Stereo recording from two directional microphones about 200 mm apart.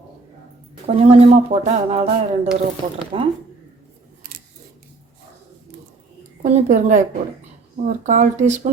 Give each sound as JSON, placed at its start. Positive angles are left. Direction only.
{"t": 0.9, "sound": "speech", "side_deg": -30}
{"t": 6.4, "sound": "speech", "side_deg": -35}